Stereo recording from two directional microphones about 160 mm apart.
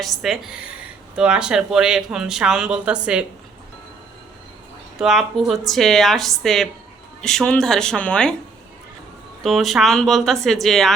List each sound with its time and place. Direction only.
0.0 s speech: centre (ahead or behind)
4.9 s speech: centre (ahead or behind)
9.4 s speech: centre (ahead or behind)